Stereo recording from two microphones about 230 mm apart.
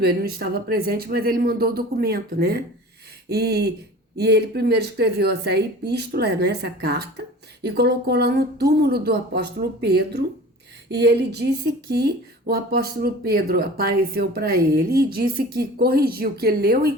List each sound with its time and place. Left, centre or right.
0.0 s speech: right